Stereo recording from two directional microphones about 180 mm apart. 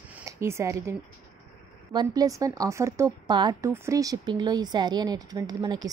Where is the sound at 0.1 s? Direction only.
15° right (ahead or behind).